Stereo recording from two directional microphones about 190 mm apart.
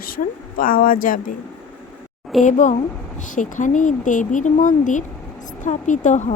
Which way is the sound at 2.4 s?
40° left (ahead or behind).